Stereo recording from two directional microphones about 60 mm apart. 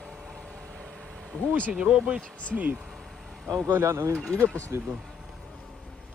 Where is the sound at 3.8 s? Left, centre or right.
Right.